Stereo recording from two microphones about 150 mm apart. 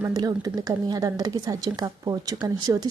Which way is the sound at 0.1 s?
25° right (ahead or behind).